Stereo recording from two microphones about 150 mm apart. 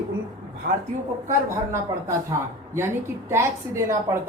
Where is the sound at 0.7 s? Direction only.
75° right (ahead or behind).